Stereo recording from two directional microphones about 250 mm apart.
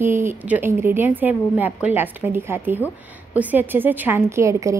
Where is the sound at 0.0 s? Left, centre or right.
Centre.